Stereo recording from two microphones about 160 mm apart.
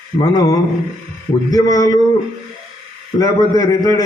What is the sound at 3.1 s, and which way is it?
Speech, 25° left (ahead or behind).